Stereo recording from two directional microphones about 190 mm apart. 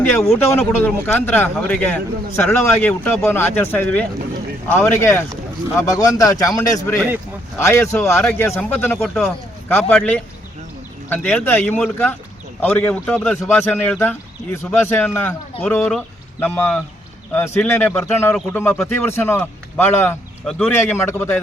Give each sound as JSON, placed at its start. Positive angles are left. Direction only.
{"t": 0.0, "sound": "speech", "side_deg": 10}